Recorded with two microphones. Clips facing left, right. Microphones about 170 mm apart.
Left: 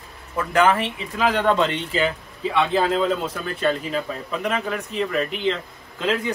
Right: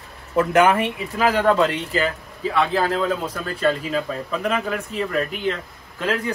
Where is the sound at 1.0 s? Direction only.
5° right (ahead or behind).